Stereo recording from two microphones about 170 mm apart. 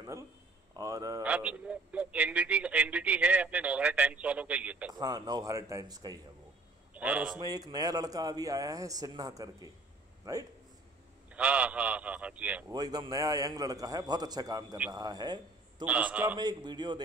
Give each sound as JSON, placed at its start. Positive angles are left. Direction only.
{"t": 0.7, "sound": "speech", "side_deg": -20}
{"t": 1.2, "sound": "a sound", "side_deg": -5}
{"t": 4.9, "sound": "a man's voice", "side_deg": -20}
{"t": 6.9, "sound": "a man's voice", "side_deg": -10}
{"t": 7.3, "sound": "a man's voice", "side_deg": -25}
{"t": 11.2, "sound": "a man's voice", "side_deg": -5}
{"t": 12.7, "sound": "a man's voice", "side_deg": -25}
{"t": 15.8, "sound": "a man's voice", "side_deg": -5}
{"t": 16.3, "sound": "a man's voice", "side_deg": -25}